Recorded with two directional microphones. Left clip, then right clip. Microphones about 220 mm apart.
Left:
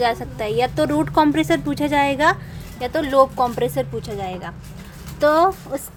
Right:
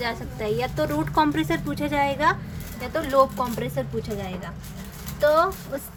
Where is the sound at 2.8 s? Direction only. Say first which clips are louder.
Left 4 dB; 50° left (ahead or behind).